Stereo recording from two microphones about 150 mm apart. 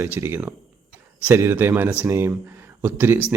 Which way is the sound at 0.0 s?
15° right (ahead or behind).